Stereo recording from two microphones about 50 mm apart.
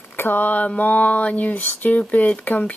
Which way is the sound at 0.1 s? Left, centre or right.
Left.